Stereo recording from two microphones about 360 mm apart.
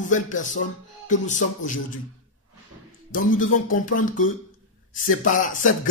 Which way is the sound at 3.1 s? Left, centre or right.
Left.